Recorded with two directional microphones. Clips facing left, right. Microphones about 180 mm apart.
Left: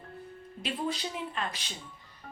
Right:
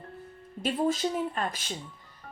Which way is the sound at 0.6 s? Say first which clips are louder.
Right 7 dB; 45° right (ahead or behind).